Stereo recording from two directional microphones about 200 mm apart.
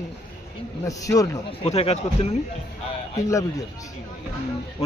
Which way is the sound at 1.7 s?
30° left (ahead or behind).